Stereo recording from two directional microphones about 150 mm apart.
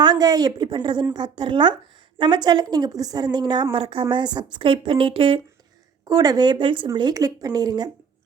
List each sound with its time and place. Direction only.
0.0 s a woman's voice: 25° right (ahead or behind)